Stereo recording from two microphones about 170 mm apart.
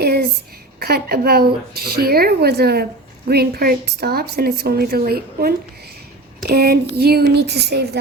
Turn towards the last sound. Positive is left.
turn(degrees=-75)  # may be behind; listen again after turning